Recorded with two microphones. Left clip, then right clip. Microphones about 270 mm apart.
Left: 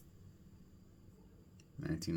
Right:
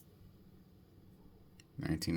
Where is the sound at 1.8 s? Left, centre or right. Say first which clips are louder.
Right 3 dB; right.